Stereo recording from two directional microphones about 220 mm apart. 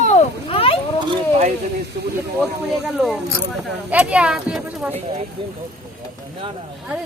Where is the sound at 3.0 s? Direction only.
Centre (ahead or behind).